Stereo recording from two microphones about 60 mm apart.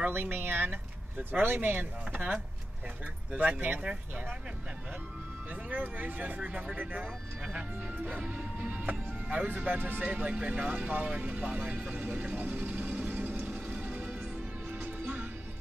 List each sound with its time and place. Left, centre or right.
0.0 s speech: right; by 4.4 s centre
5.5 s speech: right
12.4 s music: right